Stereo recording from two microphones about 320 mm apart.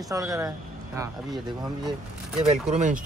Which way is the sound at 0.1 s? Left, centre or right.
Centre.